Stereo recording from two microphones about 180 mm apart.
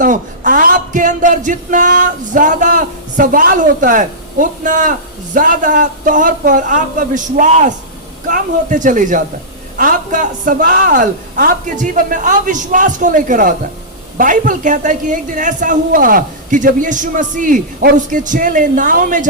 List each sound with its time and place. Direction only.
0.0 s a man's voice: 50° right (ahead or behind)